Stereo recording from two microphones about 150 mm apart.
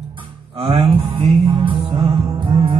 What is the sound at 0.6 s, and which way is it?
Music, 35° right (ahead or behind).